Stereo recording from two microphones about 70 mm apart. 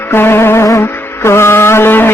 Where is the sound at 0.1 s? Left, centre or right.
Left.